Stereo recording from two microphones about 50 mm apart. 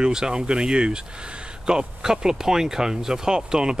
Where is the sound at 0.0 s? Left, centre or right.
Centre.